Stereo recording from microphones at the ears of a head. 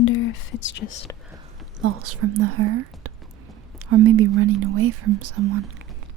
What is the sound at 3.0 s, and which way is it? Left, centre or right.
Whispering, right.